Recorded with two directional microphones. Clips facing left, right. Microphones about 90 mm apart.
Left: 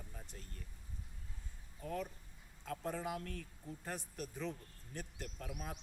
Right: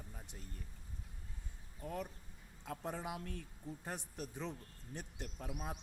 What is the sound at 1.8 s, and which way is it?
Speech, 20° right (ahead or behind).